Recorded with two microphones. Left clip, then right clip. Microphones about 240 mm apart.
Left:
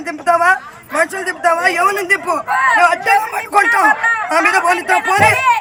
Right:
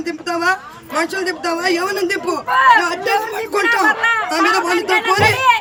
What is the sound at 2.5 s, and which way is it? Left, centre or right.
Speech, centre.